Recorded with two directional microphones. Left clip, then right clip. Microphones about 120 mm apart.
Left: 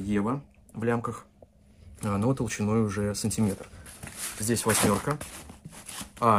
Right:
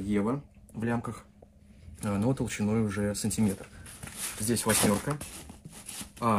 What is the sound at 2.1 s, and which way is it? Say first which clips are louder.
Speech: left 2 dB; 55° left (ahead or behind).